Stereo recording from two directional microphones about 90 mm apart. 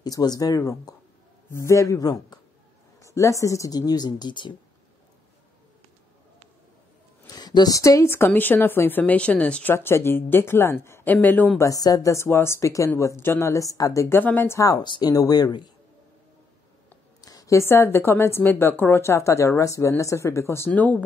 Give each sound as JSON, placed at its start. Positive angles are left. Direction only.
{"t": 0.0, "sound": "speech", "side_deg": 50}
{"t": 3.0, "sound": "speech", "side_deg": 35}
{"t": 7.2, "sound": "a woman's voice", "side_deg": 50}
{"t": 9.8, "sound": "a woman's voice", "side_deg": 25}
{"t": 11.1, "sound": "a woman's voice", "side_deg": 20}
{"t": 11.5, "sound": "speech", "side_deg": 40}
{"t": 14.1, "sound": "a woman's voice", "side_deg": 25}
{"t": 14.8, "sound": "speech", "side_deg": 55}
{"t": 17.2, "sound": "a woman's voice", "side_deg": 40}
{"t": 20.7, "sound": "speech", "side_deg": 15}